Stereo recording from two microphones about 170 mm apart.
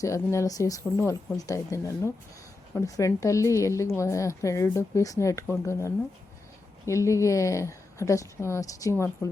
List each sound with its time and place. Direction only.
0.0 s a woman's voice: 15° left (ahead or behind)